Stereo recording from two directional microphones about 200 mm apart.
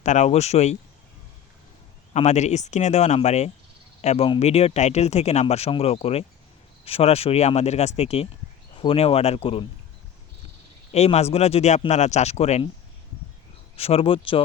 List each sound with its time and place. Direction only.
0.0 s speech: 35° left (ahead or behind)
2.1 s speech: 35° left (ahead or behind)
10.9 s speech: 35° left (ahead or behind)
13.7 s speech: 30° left (ahead or behind)